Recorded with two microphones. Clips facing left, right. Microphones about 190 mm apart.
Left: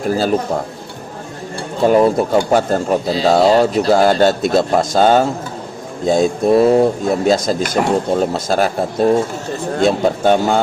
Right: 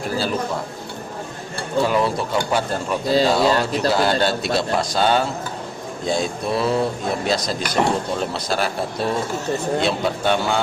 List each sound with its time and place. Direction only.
0.0 s speech: 45° left (ahead or behind)
1.9 s speech: 45° left (ahead or behind)